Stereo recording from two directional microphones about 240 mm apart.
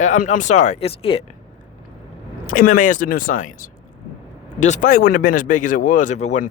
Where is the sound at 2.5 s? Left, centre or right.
Left.